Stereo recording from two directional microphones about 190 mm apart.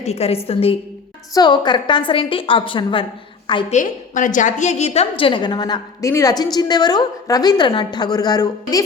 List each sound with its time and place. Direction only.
0.0 s a woman's voice: 35° left (ahead or behind)
3.8 s a woman's voice: 40° left (ahead or behind); by 8.8 s 20° left (ahead or behind)